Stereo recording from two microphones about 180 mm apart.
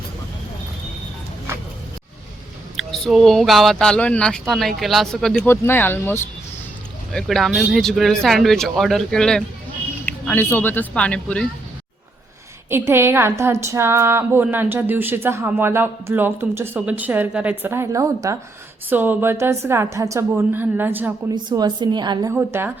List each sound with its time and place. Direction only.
2.7 s speech: centre (ahead or behind)
12.7 s speech: 15° right (ahead or behind)
21.3 s a woman's voice: 25° right (ahead or behind)